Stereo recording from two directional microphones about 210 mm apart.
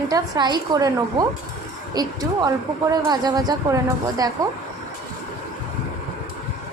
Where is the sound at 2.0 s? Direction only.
20° right (ahead or behind).